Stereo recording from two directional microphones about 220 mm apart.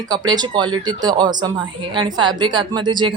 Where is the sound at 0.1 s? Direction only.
20° right (ahead or behind).